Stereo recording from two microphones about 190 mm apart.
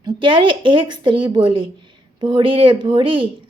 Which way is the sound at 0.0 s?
25° right (ahead or behind).